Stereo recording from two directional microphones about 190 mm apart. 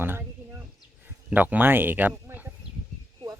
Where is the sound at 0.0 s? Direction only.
10° right (ahead or behind).